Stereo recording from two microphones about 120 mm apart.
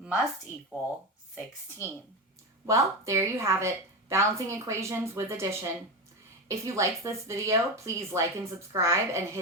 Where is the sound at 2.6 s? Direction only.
25° right (ahead or behind).